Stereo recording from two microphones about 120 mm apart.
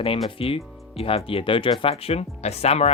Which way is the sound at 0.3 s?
50° left (ahead or behind).